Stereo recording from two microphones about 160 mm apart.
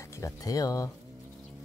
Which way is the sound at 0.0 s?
20° left (ahead or behind).